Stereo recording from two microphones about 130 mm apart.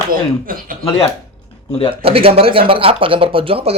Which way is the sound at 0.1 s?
90° right.